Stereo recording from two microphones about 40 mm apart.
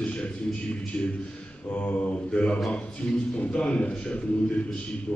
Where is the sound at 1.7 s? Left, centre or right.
Left.